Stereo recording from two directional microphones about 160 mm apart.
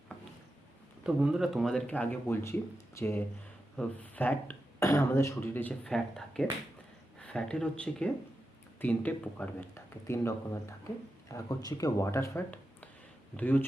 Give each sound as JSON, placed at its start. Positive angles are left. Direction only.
{"t": 1.0, "sound": "speech", "side_deg": -5}